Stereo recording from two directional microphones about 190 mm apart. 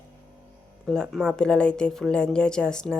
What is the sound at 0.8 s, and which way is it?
Speech, 5° left (ahead or behind).